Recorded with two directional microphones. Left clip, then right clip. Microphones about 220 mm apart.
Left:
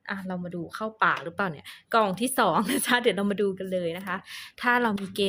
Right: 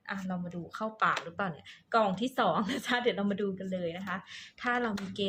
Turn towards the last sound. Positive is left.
turn(degrees=50)  # may be behind; listen again after turning